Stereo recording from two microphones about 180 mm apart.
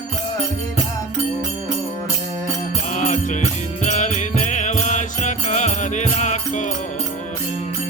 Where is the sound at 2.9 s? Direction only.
40° left (ahead or behind).